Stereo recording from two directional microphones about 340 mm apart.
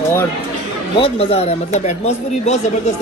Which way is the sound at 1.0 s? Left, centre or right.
Centre.